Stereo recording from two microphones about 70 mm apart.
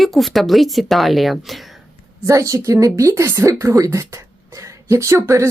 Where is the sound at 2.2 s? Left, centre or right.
Right.